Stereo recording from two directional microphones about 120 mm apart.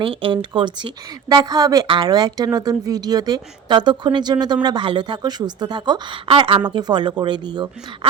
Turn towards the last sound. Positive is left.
turn(degrees=-40)  # may be behind; listen again after turning